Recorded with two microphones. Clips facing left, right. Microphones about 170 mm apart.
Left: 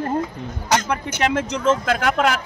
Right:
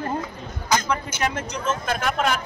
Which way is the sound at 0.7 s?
70° left (ahead or behind).